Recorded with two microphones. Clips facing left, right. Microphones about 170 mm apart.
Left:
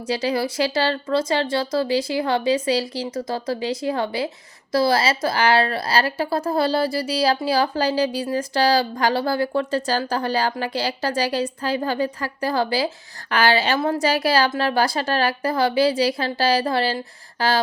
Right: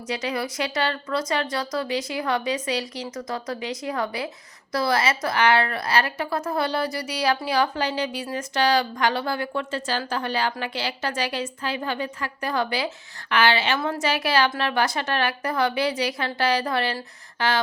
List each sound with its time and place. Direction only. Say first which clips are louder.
0.1 s a woman's voice: left 5 dB; 30° left (ahead or behind)